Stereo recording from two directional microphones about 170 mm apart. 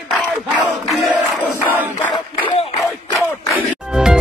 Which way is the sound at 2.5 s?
35° left (ahead or behind).